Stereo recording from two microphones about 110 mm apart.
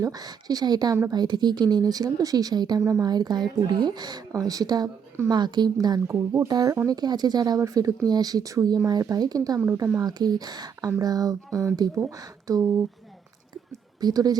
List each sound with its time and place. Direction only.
0.0 s speech: 35° right (ahead or behind)
14.0 s speech: 35° right (ahead or behind)